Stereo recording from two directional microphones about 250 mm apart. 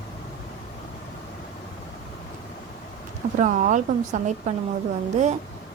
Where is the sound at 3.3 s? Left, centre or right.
Right.